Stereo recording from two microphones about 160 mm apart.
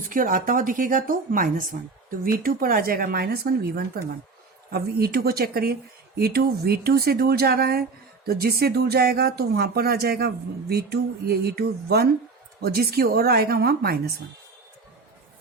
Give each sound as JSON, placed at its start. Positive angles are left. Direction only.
{"t": 0.0, "sound": "speech", "side_deg": -60}